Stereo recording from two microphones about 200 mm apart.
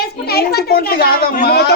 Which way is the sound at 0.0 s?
50° left (ahead or behind).